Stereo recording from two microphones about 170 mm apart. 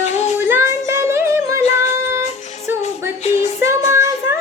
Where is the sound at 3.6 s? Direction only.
15° right (ahead or behind).